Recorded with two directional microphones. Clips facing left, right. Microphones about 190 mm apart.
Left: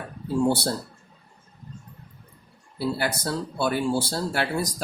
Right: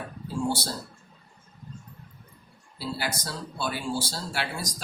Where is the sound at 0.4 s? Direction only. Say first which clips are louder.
Left 5 dB; 60° left (ahead or behind).